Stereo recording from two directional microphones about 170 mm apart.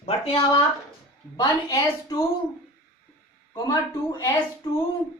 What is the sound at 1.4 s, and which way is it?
Speech, 20° left (ahead or behind).